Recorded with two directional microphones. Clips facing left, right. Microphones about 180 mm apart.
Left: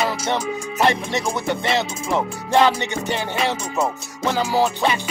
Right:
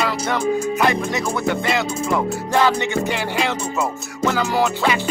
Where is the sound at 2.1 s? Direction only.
20° left (ahead or behind).